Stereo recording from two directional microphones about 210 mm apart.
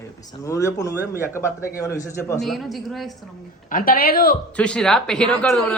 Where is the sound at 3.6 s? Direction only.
40° left (ahead or behind).